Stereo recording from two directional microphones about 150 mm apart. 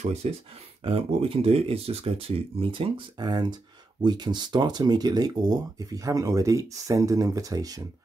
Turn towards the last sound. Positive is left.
turn(degrees=-25)  # may be behind; listen again after turning